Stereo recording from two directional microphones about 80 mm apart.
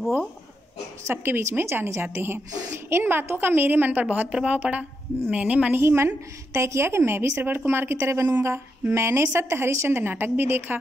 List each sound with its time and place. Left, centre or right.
1.0 s a woman's voice: right
5.8 s a woman's voice: right